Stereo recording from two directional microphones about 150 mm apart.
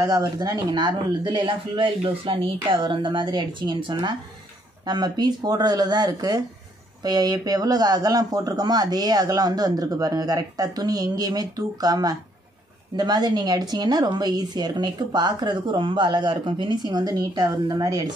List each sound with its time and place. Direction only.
0.0 s speech: 25° right (ahead or behind)